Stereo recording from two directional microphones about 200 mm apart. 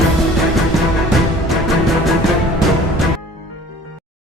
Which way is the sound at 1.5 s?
Centre (ahead or behind).